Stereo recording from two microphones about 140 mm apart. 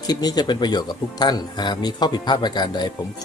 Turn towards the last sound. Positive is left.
turn(degrees=30)  # may be behind; listen again after turning